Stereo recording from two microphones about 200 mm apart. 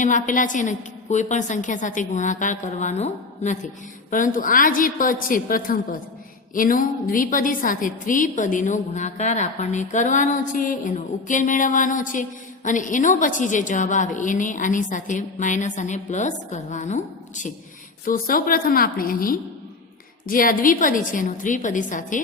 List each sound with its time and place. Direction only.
0.0 s a woman's voice: 40° left (ahead or behind)